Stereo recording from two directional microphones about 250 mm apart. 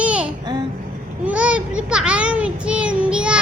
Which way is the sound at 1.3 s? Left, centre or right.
Centre.